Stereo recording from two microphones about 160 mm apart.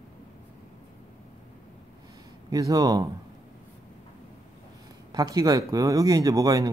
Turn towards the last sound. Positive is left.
turn(degrees=-20)  # may be behind; listen again after turning